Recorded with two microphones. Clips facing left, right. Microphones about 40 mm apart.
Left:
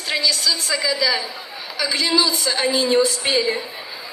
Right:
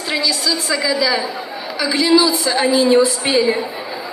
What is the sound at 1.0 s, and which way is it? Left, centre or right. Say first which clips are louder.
A woman's voice: right 3 dB; right.